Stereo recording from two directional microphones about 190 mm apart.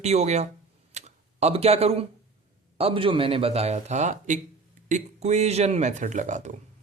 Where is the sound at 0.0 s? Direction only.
35° right (ahead or behind).